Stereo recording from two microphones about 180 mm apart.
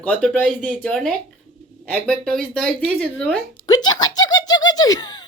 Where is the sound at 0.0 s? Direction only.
5° left (ahead or behind).